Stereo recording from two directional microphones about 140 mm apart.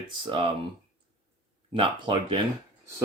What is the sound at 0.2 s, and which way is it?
Speech, 35° right (ahead or behind).